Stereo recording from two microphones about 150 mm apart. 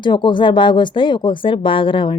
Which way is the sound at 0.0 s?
30° left (ahead or behind).